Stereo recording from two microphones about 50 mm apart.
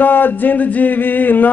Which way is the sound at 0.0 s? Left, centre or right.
Left.